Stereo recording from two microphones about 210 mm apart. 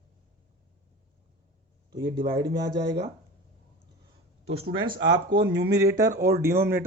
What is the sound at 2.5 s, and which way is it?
Speech, 55° right (ahead or behind).